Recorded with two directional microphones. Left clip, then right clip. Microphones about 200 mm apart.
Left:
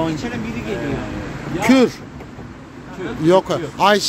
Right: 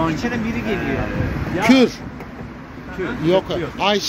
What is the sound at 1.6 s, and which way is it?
Speech, 20° left (ahead or behind).